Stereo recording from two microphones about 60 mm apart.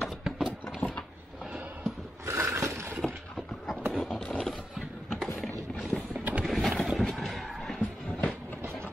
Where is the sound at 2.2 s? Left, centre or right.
Right.